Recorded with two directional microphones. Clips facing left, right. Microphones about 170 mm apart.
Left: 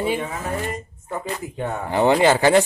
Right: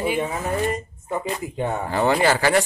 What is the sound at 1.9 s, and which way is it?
Speech, 20° left (ahead or behind).